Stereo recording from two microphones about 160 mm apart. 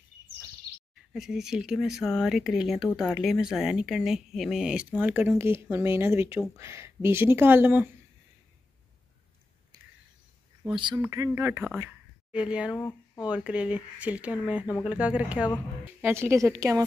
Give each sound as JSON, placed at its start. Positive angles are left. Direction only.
{"t": 1.1, "sound": "speech", "side_deg": -5}
{"t": 10.6, "sound": "speech", "side_deg": -30}
{"t": 11.1, "sound": "speech", "side_deg": -15}
{"t": 11.8, "sound": "a sound", "side_deg": -5}
{"t": 12.7, "sound": "speech", "side_deg": 15}
{"t": 13.3, "sound": "speech", "side_deg": -10}